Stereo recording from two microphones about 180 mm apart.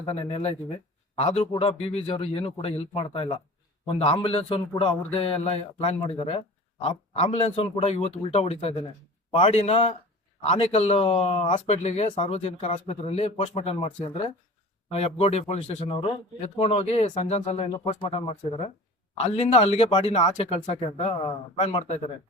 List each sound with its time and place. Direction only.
0.0 s speech: 30° left (ahead or behind)